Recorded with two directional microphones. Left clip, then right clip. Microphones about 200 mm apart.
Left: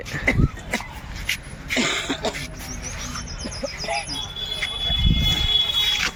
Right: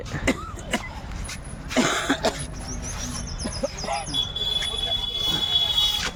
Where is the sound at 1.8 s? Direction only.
35° right (ahead or behind).